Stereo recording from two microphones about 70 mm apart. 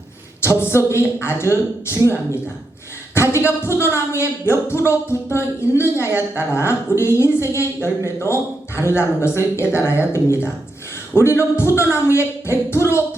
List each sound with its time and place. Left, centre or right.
0.4 s a woman's voice: left
3.2 s a man's voice: left